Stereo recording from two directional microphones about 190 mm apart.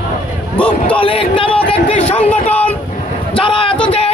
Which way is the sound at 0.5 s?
10° left (ahead or behind).